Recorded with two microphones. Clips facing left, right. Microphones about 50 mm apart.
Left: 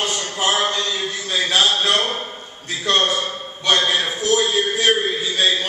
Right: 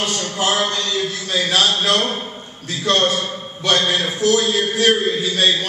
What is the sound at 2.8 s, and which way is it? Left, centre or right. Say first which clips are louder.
A man's voice: right 1 dB; centre.